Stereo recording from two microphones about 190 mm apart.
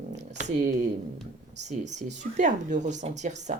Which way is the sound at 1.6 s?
40° right (ahead or behind).